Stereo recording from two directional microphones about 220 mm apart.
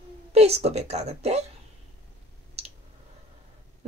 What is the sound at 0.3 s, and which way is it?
Speech, 30° right (ahead or behind).